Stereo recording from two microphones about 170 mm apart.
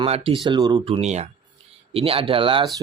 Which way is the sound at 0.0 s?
35° right (ahead or behind).